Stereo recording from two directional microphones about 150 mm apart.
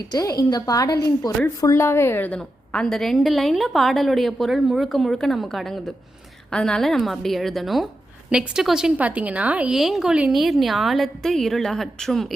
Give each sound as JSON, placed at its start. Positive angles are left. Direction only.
{"t": 0.1, "sound": "a woman's voice", "side_deg": 25}